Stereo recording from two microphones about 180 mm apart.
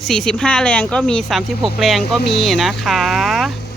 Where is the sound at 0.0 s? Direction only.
Centre (ahead or behind).